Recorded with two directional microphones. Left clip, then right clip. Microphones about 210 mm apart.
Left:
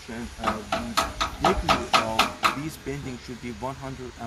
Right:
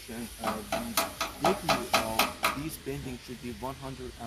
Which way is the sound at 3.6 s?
10° left (ahead or behind).